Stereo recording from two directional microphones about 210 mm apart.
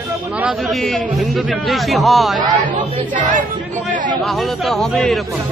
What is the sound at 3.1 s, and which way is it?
Speech, 35° right (ahead or behind).